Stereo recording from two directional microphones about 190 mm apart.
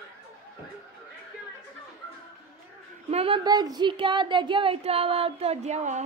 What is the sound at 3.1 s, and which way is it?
Speech, 30° right (ahead or behind).